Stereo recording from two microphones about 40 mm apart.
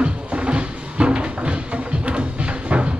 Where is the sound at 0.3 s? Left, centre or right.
Right.